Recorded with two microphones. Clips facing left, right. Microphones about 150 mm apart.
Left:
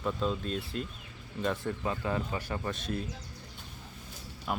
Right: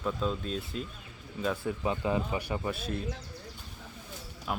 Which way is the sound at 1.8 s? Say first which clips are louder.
Right 4 dB; 15° right (ahead or behind).